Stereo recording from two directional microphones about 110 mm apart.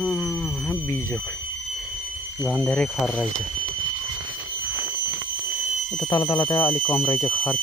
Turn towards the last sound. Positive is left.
turn(degrees=15)  # may be behind; listen again after turning